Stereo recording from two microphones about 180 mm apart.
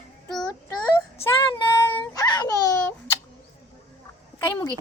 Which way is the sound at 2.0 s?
20° left (ahead or behind).